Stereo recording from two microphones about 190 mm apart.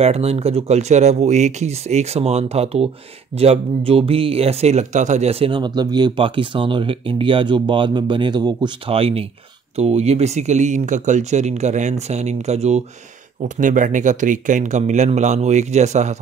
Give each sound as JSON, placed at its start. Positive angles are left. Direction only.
{"t": 0.0, "sound": "speech", "side_deg": -35}